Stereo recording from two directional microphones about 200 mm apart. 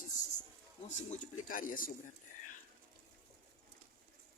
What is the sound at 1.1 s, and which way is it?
Speech, 40° left (ahead or behind).